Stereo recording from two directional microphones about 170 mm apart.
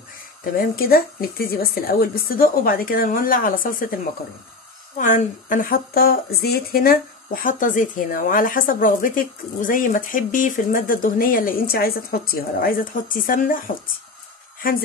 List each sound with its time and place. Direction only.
0.4 s speech: 60° left (ahead or behind)